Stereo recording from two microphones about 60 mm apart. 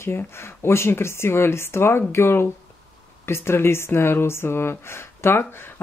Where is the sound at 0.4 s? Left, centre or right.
Left.